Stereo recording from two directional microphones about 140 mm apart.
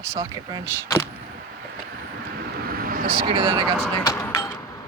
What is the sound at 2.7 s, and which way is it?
Vehicle, 90° right.